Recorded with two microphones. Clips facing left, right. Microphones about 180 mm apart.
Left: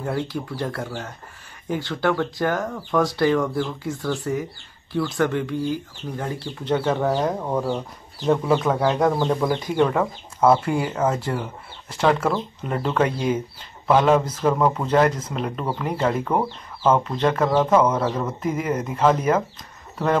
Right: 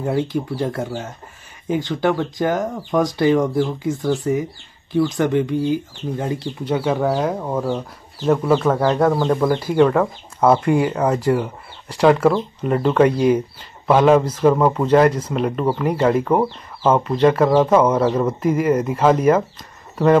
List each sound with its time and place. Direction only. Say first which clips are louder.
0.0 s speech: right 5 dB; 20° right (ahead or behind)
6.6 s speech: right 1 dB; 10° right (ahead or behind)